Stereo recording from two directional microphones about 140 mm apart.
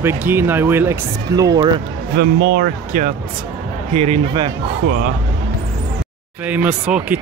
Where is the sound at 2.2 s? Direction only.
90° right.